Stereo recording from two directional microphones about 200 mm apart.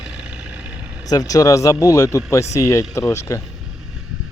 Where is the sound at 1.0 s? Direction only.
20° left (ahead or behind).